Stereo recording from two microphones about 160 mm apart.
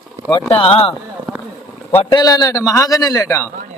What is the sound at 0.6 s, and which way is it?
Speech, 35° left (ahead or behind).